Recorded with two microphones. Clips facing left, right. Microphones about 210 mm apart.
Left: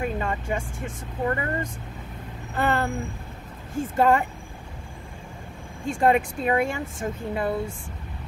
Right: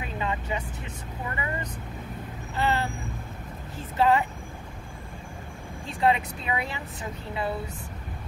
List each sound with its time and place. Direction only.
0.0 s speech: 50° left (ahead or behind)
5.9 s speech: 50° left (ahead or behind)